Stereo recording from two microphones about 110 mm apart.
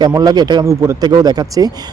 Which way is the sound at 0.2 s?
35° right (ahead or behind).